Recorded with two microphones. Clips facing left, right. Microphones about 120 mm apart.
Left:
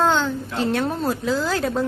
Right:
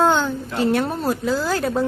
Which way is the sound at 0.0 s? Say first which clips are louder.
Right 2 dB; 10° right (ahead or behind).